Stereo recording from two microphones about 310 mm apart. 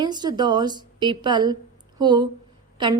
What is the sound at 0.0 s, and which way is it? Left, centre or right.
A woman's voice, centre.